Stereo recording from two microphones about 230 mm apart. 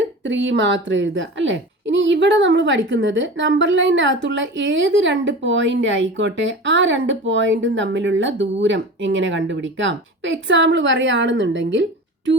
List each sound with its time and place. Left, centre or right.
0.3 s a woman's voice: right